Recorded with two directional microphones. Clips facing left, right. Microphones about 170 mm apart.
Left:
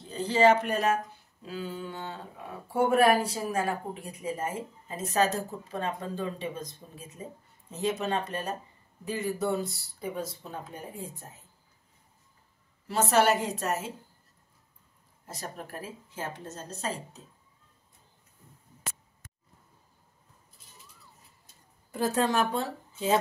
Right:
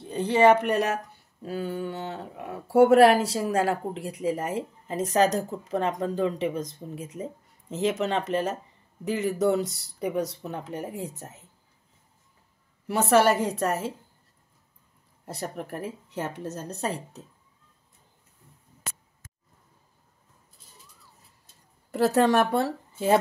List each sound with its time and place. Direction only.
0.2 s a woman's voice: 60° right (ahead or behind)
1.4 s speech: 55° right (ahead or behind); by 7.2 s 80° right
7.7 s speech: 90° right; by 11.4 s 75° right (ahead or behind)
12.8 s a woman's voice: 65° right (ahead or behind)
15.2 s a woman's voice: 65° right (ahead or behind)
21.9 s speech: 70° right (ahead or behind)